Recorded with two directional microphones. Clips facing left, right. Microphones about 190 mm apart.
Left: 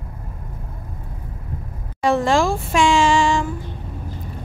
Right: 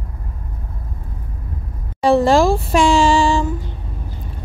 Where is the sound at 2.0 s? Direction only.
35° right (ahead or behind).